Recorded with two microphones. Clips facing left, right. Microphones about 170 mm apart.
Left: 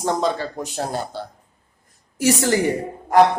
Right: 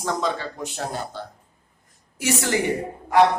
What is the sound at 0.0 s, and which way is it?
A woman's voice, 35° left (ahead or behind).